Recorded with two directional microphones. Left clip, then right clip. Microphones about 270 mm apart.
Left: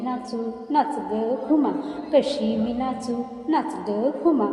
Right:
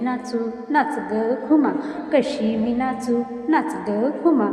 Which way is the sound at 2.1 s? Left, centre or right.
Right.